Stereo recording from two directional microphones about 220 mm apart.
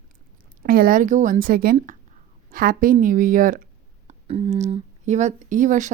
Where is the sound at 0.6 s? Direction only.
45° right (ahead or behind).